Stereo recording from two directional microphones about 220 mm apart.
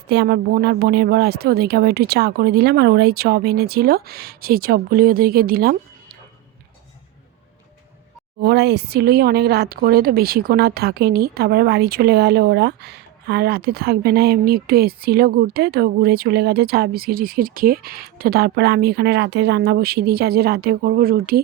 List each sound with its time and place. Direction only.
0.1 s speech: 45° right (ahead or behind)
8.4 s speech: 50° right (ahead or behind)